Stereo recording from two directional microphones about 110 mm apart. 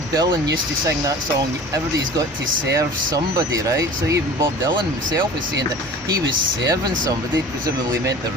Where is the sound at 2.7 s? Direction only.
30° right (ahead or behind).